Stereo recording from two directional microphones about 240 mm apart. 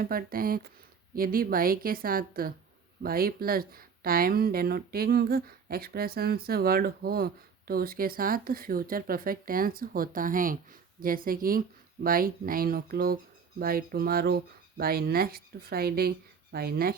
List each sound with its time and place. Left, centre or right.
0.0 s speech: right